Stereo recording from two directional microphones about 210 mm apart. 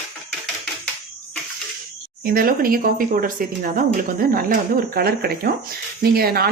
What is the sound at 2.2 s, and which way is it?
Speech, 45° right (ahead or behind).